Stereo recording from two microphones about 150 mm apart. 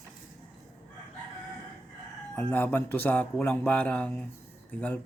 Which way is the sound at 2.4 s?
10° left (ahead or behind).